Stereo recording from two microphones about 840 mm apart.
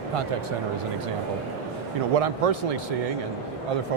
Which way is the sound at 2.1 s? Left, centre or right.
Right.